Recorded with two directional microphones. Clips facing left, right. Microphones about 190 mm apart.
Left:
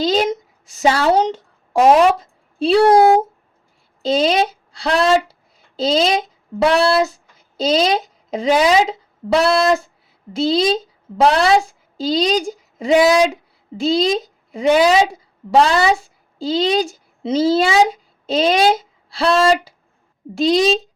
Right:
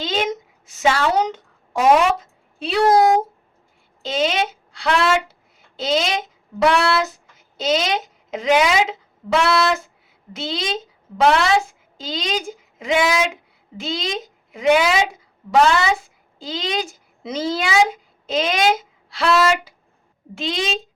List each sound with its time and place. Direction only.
0.0 s a woman's voice: 35° left (ahead or behind)